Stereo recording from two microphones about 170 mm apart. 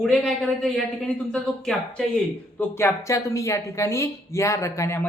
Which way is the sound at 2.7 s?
15° left (ahead or behind).